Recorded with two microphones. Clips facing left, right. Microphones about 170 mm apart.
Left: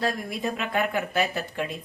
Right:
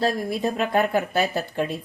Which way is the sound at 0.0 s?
30° right (ahead or behind).